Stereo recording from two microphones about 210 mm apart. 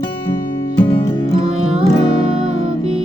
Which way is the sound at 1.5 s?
5° right (ahead or behind).